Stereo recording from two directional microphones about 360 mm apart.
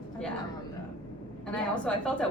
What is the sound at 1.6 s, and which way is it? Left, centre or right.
Speech, centre.